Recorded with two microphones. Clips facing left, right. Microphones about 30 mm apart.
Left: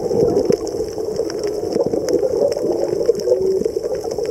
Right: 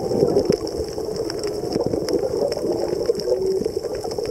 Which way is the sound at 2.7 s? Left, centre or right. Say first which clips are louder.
Left 4 dB; right.